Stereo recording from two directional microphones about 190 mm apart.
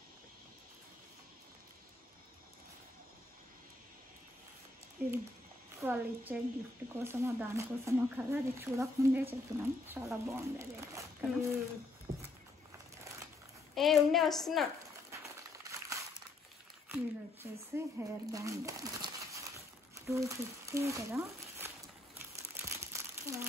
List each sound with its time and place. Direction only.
5.0 s speech: 10° right (ahead or behind)
12.1 s a sound: 15° right (ahead or behind)
13.7 s a woman's voice: centre (ahead or behind)
15.0 s crumpling: 15° right (ahead or behind)
16.9 s speech: 10° right (ahead or behind)
18.3 s crumpling: 15° right (ahead or behind)
20.1 s speech: 15° right (ahead or behind)
22.3 s crumpling: 15° right (ahead or behind)